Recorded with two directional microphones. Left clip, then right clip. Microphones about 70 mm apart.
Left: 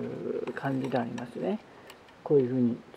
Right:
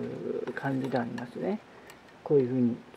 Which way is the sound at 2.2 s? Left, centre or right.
Left.